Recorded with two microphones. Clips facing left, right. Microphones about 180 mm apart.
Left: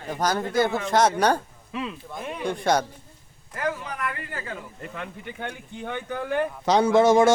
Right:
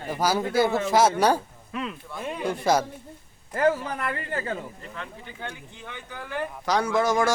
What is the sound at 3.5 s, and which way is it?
A man's voice, 30° right (ahead or behind).